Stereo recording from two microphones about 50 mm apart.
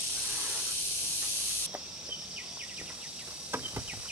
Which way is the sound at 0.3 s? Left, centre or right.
Right.